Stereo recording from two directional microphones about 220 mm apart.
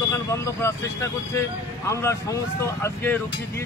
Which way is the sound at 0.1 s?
15° left (ahead or behind).